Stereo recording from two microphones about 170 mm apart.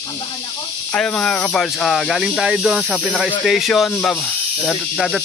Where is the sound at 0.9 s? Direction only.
5° left (ahead or behind).